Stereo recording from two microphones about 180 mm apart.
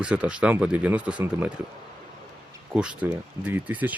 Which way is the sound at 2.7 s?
5° right (ahead or behind).